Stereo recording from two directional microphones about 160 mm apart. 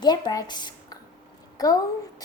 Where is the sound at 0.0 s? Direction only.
25° left (ahead or behind).